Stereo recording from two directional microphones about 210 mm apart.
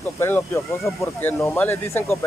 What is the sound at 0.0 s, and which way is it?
Speech, 10° left (ahead or behind).